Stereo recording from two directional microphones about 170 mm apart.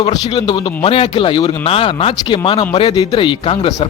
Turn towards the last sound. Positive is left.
turn(degrees=30)  # may be behind; listen again after turning